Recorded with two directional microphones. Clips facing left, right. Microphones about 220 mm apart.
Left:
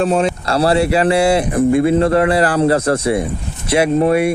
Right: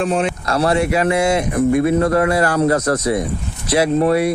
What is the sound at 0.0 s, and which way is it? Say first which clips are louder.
Speech: left 3 dB; 35° left (ahead or behind).